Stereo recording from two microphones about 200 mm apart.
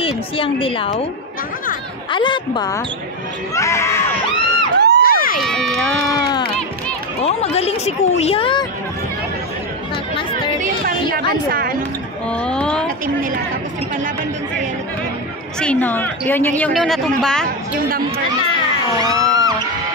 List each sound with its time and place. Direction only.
0.0 s a woman's voice: 25° left (ahead or behind)
2.0 s a woman's voice: 25° left (ahead or behind)
4.7 s crowd: 55° right (ahead or behind)
5.0 s crowd: 45° left (ahead or behind)
5.4 s a woman's voice: centre (ahead or behind)
7.2 s speech: 30° left (ahead or behind)
10.6 s a woman's voice: 45° right (ahead or behind)
12.3 s a sound: 5° left (ahead or behind)
15.6 s a woman's voice: 5° left (ahead or behind)
18.9 s speech: 20° right (ahead or behind)